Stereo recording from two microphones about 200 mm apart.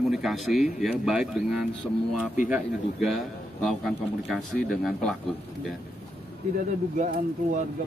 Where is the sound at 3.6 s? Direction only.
Centre (ahead or behind).